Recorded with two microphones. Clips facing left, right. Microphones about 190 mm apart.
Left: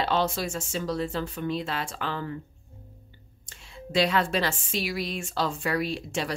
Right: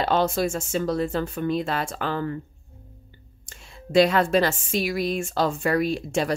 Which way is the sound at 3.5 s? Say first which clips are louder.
Right 7 dB; 50° right (ahead or behind).